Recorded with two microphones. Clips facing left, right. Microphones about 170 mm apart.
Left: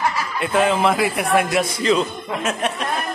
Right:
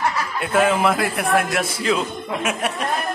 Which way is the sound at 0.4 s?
5° right (ahead or behind).